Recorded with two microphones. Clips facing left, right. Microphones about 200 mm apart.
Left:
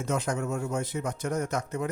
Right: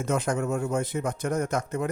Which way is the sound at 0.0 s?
55° right (ahead or behind).